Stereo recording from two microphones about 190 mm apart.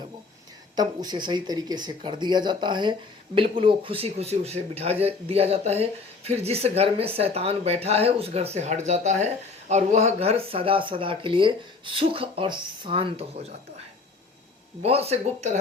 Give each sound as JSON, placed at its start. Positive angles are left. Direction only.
{"t": 0.8, "sound": "speech", "side_deg": -25}
{"t": 14.8, "sound": "speech", "side_deg": -30}